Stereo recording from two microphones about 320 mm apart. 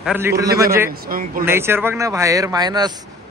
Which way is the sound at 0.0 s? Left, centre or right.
Centre.